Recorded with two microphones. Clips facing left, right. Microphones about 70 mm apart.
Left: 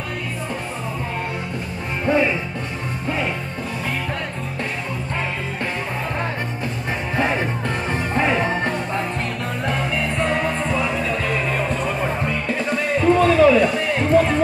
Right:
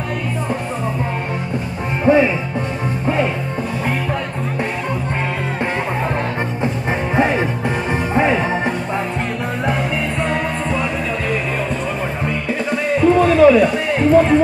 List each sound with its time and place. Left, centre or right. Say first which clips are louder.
2.1 s music: right 6 dB; centre
7.2 s music: right 4 dB; centre